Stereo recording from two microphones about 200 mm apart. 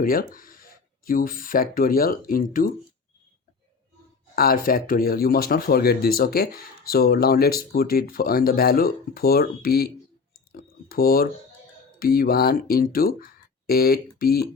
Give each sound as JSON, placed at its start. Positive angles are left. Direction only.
{"t": 0.0, "sound": "speech", "side_deg": 45}
{"t": 4.4, "sound": "speech", "side_deg": 45}
{"t": 10.5, "sound": "a sound", "side_deg": 50}
{"t": 11.9, "sound": "speech", "side_deg": 45}